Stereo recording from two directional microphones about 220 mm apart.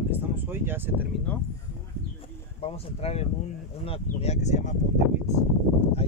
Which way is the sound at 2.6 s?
30° left (ahead or behind).